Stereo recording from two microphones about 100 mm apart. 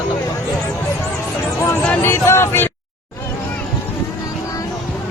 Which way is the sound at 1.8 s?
20° left (ahead or behind).